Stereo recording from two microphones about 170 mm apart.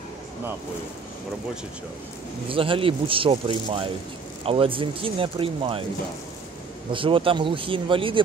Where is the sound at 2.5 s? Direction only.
30° right (ahead or behind).